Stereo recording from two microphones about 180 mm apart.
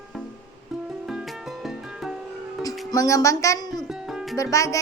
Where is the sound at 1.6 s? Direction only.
Centre (ahead or behind).